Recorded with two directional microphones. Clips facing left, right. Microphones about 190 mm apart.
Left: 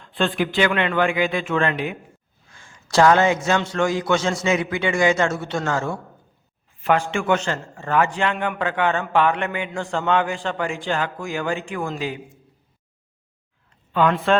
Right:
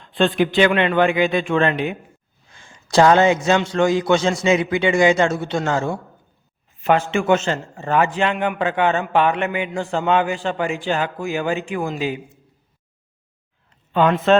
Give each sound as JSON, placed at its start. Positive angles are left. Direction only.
{"t": 0.0, "sound": "a man's voice", "side_deg": -20}
{"t": 7.1, "sound": "a man's voice", "side_deg": -20}
{"t": 13.9, "sound": "a man's voice", "side_deg": -25}